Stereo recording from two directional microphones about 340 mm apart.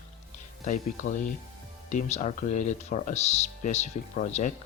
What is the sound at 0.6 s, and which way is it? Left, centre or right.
Speech, left.